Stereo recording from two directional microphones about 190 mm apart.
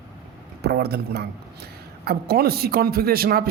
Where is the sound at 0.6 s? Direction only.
55° right (ahead or behind).